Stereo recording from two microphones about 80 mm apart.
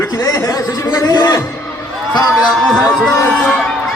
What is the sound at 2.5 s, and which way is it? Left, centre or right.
Speech, centre.